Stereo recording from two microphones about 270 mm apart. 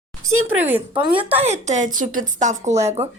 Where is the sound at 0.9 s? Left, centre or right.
Centre.